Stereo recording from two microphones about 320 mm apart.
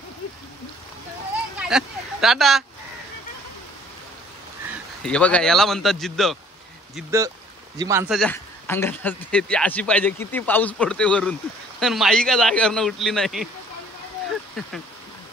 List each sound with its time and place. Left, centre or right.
1.6 s speech: centre
5.0 s a man's voice: centre
8.2 s a man's voice: centre